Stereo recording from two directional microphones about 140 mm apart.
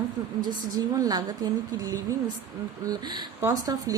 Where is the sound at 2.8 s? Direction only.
30° right (ahead or behind).